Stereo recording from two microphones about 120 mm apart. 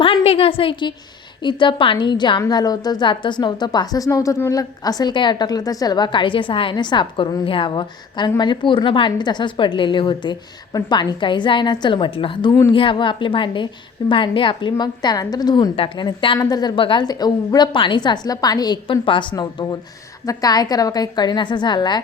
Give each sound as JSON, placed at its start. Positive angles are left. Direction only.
{"t": 0.0, "sound": "a woman's voice", "side_deg": 50}
{"t": 15.7, "sound": "a woman's voice", "side_deg": 50}
{"t": 16.4, "sound": "a woman's voice", "side_deg": 35}
{"t": 19.4, "sound": "a woman's voice", "side_deg": 35}